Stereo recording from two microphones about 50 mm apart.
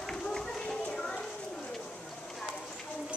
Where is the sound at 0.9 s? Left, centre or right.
Centre.